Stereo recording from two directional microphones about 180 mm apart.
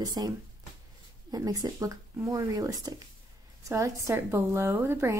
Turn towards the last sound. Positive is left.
turn(degrees=-15)  # may be behind; listen again after turning